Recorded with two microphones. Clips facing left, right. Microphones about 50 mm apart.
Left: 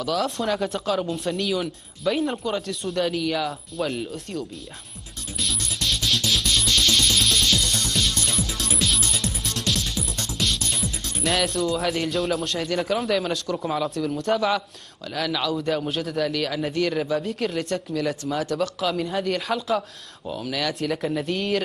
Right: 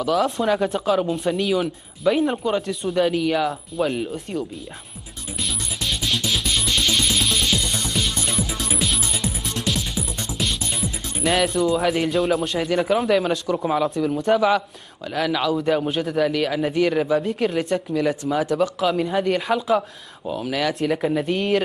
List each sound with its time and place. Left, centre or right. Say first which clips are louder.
0.0 s speech: right 4 dB; centre
5.4 s music: even; centre
12.5 s speech: right 4 dB; centre
16.2 s speech: right 5 dB; centre
17.2 s speech: right 4 dB; centre